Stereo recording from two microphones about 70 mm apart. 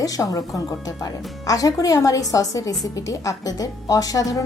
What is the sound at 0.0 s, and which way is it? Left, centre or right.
A woman's voice, left.